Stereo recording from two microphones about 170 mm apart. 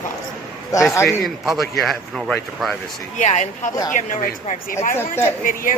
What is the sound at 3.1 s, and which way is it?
Speech, 45° left (ahead or behind).